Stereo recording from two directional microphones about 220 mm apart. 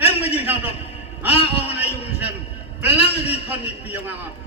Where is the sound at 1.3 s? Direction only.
25° left (ahead or behind).